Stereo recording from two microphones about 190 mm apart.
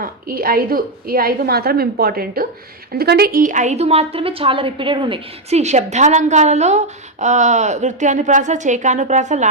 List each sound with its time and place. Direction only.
0.0 s a woman's voice: 50° right (ahead or behind)